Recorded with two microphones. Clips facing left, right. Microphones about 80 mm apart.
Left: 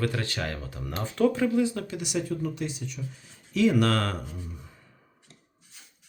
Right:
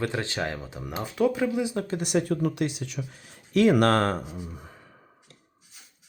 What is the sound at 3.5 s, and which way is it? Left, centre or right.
Speech, right.